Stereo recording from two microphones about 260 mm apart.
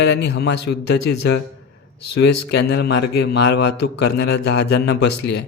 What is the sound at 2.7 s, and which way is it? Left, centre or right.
A man's voice, left.